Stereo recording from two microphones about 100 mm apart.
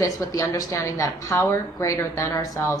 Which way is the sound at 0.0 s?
35° left (ahead or behind).